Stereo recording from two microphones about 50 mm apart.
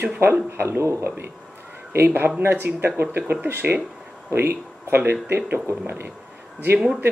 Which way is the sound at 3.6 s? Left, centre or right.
Right.